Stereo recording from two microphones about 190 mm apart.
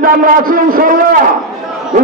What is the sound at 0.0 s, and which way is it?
A man's voice, 50° right (ahead or behind).